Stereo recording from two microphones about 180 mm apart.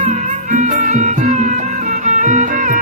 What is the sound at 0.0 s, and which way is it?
Music, 40° right (ahead or behind).